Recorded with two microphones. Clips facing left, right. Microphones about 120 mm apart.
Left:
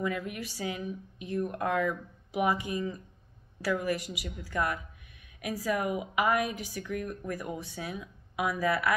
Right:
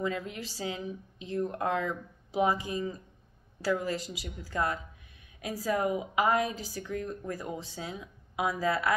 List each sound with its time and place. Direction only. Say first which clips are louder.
0.0 s a woman's voice: even; 25° right (ahead or behind)